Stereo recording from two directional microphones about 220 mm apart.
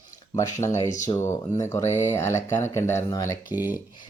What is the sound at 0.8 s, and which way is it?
Speech, 35° left (ahead or behind).